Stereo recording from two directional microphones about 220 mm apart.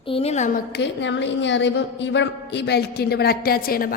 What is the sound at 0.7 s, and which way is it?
A woman's voice, 55° left (ahead or behind).